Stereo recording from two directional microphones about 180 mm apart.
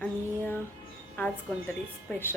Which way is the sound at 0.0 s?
10° left (ahead or behind).